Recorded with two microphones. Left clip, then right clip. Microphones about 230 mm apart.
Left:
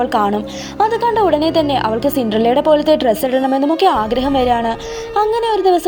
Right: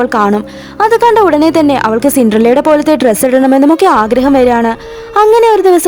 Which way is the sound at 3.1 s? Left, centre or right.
Right.